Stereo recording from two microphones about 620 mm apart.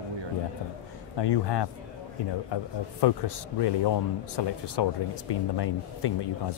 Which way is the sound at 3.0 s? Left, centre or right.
Left.